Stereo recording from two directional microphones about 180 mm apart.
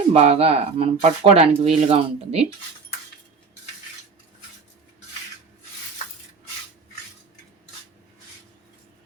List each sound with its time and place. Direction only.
0.1 s speech: 35° right (ahead or behind)